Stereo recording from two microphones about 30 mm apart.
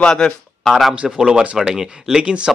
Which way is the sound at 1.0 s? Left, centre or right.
Right.